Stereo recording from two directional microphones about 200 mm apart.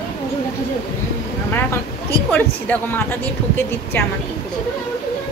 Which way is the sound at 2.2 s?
10° left (ahead or behind).